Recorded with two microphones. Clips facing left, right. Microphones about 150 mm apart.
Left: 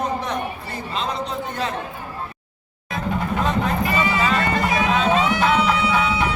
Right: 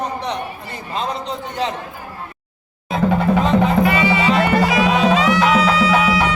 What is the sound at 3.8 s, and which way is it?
Music, 75° right (ahead or behind).